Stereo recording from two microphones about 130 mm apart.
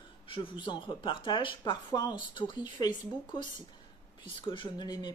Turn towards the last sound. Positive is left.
turn(degrees=35)  # may be behind; listen again after turning